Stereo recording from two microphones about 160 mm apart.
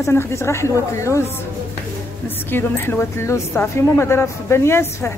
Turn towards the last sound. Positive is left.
turn(degrees=15)  # may be behind; listen again after turning